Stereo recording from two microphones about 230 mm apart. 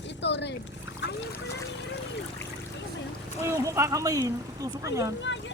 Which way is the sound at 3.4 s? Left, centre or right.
Centre.